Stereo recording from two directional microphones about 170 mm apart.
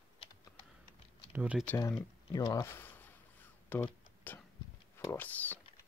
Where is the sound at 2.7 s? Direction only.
10° left (ahead or behind).